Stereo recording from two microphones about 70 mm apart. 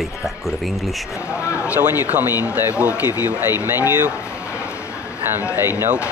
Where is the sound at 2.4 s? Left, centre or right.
Centre.